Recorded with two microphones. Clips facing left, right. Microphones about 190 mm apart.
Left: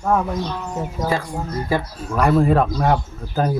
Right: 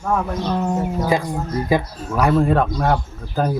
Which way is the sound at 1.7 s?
15° right (ahead or behind).